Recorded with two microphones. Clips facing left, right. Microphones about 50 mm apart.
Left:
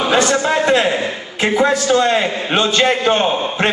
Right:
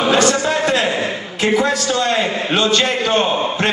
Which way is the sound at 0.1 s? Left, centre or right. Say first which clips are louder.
Left 2 dB; left.